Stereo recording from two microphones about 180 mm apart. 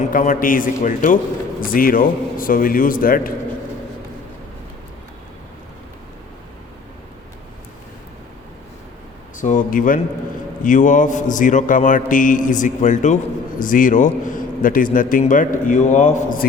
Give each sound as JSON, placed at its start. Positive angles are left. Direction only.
{"t": 0.1, "sound": "a man's voice", "side_deg": 50}
{"t": 9.4, "sound": "a man's voice", "side_deg": 45}